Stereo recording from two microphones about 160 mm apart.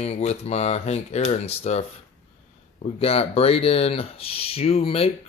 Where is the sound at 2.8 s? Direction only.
40° left (ahead or behind).